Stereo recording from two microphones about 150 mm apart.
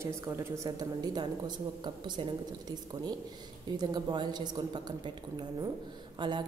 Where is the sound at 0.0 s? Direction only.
20° right (ahead or behind).